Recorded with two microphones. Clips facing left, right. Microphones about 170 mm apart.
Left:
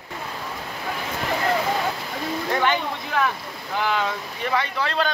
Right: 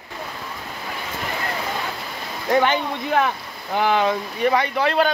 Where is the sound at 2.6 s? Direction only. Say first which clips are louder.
Right 2 dB; 25° right (ahead or behind).